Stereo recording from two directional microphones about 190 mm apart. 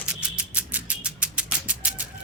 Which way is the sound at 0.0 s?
5° right (ahead or behind).